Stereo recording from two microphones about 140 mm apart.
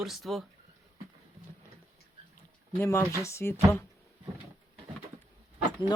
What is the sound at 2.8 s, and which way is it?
Speech, 15° left (ahead or behind).